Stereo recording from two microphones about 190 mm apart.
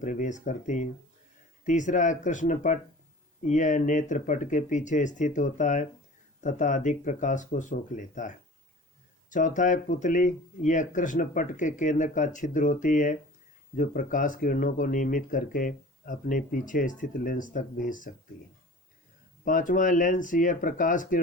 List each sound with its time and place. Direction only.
0.0 s speech: 40° left (ahead or behind)
19.5 s speech: 45° left (ahead or behind)